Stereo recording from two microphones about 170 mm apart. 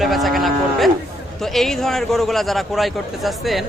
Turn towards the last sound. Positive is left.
turn(degrees=0)  # may be behind; listen again after turning